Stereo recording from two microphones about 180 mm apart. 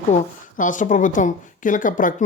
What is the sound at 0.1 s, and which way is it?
A woman's voice, 45° left (ahead or behind).